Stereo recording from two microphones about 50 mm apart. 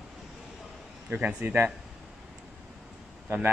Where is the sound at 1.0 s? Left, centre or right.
Right.